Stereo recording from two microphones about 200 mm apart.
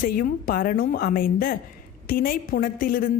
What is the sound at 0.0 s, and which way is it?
A woman's voice, 45° left (ahead or behind).